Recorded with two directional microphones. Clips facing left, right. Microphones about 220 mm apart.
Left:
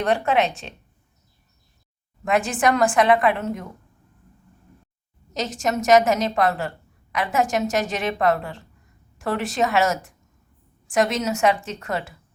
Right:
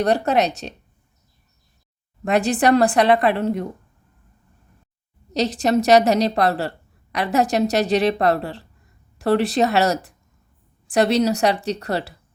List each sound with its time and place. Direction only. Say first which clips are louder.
0.0 s a woman's voice: right 2 dB; 40° right (ahead or behind)
2.2 s a woman's voice: right 3 dB; 35° right (ahead or behind)
5.3 s a woman's voice: right 6 dB; 35° right (ahead or behind)